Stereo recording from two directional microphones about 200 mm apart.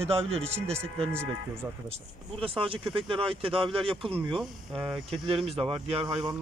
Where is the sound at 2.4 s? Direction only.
25° right (ahead or behind).